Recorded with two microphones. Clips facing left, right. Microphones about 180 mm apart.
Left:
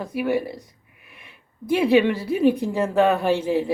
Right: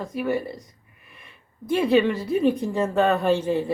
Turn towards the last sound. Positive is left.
turn(degrees=5)  # may be behind; listen again after turning